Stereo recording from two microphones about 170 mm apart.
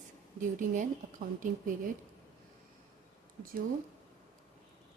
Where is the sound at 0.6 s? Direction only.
50° right (ahead or behind).